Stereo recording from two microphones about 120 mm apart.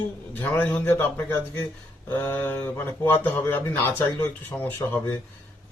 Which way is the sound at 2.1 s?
25° left (ahead or behind).